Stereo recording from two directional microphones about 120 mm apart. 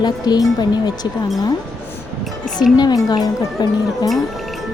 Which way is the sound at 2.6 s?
35° left (ahead or behind).